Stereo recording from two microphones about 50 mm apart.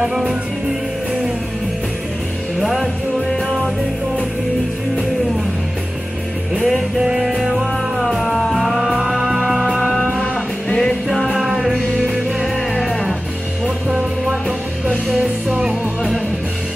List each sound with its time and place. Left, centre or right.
2.6 s music: centre
7.0 s music: centre
7.5 s music: centre
10.0 s music: left
11.3 s music: centre